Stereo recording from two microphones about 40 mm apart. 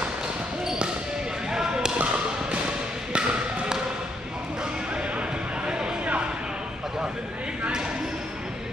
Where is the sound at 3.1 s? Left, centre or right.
Right.